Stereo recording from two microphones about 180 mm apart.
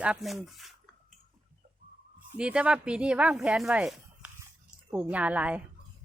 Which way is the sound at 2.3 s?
5° right (ahead or behind).